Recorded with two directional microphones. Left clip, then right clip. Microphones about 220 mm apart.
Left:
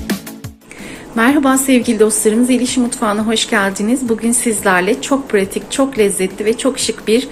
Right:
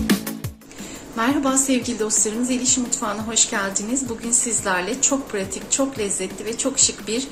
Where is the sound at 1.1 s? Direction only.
20° left (ahead or behind).